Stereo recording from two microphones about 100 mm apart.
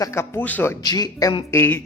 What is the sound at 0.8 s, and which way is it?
Speech, 40° left (ahead or behind).